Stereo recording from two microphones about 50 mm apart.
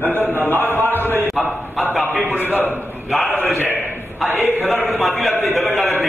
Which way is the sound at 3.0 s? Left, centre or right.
Centre.